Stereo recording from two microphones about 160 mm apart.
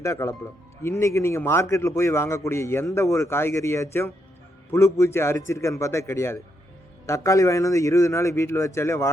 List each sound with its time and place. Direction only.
0.0 s a man's voice: 20° left (ahead or behind)